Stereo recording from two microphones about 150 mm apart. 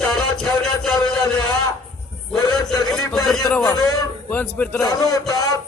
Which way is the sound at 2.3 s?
25° left (ahead or behind).